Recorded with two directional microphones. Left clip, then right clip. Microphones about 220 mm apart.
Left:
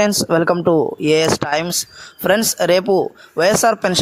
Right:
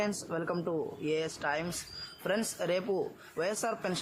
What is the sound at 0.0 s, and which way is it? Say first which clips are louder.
Speech: left 19 dB; 45° left (ahead or behind).